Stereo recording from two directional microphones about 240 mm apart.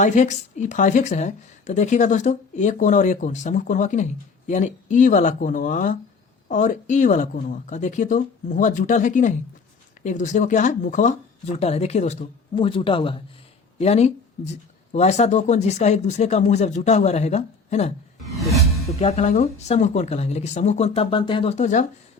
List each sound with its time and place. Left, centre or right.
0.0 s a woman's voice: left
18.3 s music: centre
18.9 s speech: left